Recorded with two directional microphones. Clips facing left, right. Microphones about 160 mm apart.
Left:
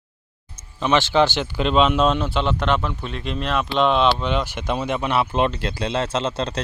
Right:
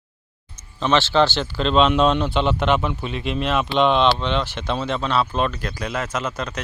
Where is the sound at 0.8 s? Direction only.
15° left (ahead or behind).